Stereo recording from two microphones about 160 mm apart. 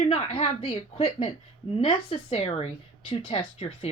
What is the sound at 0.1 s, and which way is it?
Speech, 40° left (ahead or behind).